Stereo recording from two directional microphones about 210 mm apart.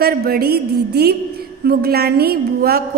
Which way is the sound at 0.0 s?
50° right (ahead or behind).